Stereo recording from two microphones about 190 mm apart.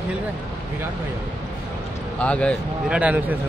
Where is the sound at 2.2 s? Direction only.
5° left (ahead or behind).